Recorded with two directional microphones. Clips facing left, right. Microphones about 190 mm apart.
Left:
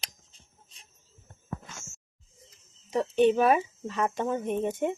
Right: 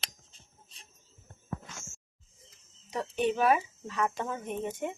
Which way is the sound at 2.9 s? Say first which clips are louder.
Left 7 dB; 25° left (ahead or behind).